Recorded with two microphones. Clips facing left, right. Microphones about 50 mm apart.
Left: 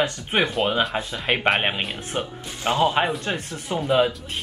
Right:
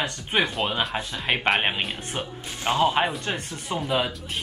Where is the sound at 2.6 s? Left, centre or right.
Left.